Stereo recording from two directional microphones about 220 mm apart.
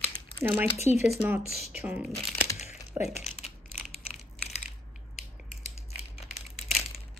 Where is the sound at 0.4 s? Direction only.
10° right (ahead or behind).